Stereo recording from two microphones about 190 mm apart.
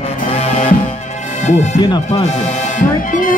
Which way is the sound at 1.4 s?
35° left (ahead or behind).